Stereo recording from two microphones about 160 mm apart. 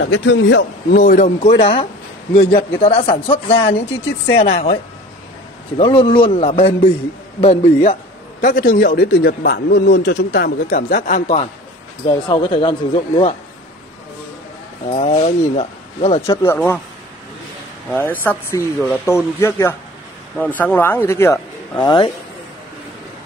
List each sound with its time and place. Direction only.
0.0 s a man's voice: 90° left; by 1.5 s 55° left (ahead or behind)
1.6 s speech: 35° left (ahead or behind)
5.8 s speech: 35° left (ahead or behind)
8.4 s a man's voice: 60° left (ahead or behind)
12.1 s speech: 30° left (ahead or behind)
14.9 s speech: 40° left (ahead or behind)
16.3 s speech: 15° left (ahead or behind)
17.8 s speech: 10° left (ahead or behind)